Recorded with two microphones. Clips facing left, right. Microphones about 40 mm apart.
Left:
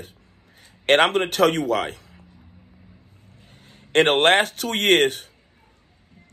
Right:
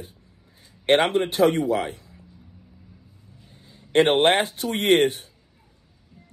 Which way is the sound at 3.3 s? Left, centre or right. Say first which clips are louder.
Left 1 dB; left.